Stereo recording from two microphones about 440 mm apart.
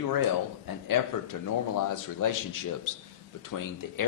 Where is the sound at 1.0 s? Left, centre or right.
Left.